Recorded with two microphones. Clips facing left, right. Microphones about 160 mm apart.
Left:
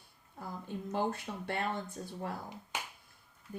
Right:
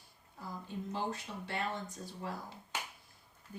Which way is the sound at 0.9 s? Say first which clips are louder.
Left 6 dB; 55° left (ahead or behind).